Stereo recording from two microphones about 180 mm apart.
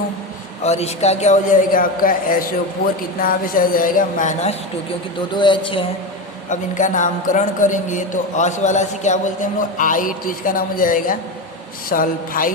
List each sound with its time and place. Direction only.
0.6 s a man's voice: 35° left (ahead or behind)
5.3 s speech: 25° left (ahead or behind)
6.5 s a man's voice: 45° left (ahead or behind)